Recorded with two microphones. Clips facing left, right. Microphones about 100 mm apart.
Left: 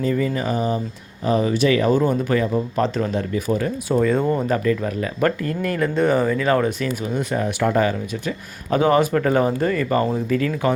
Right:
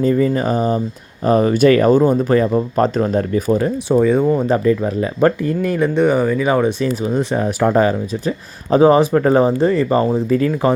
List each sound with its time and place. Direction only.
0.0 s speech: 35° right (ahead or behind)
3.9 s speech: 15° right (ahead or behind)
4.4 s speech: 25° right (ahead or behind)